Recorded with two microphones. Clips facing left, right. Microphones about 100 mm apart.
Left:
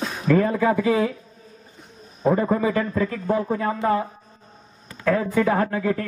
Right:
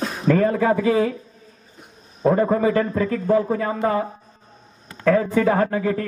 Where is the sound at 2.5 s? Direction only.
30° right (ahead or behind).